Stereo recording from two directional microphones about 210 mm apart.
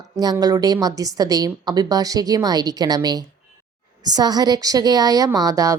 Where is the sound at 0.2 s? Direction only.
20° right (ahead or behind).